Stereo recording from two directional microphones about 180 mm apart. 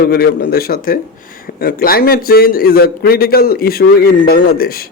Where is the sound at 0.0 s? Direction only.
60° left (ahead or behind).